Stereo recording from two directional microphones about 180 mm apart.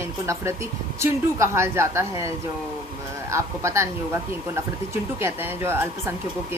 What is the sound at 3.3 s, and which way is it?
Speech, 15° right (ahead or behind).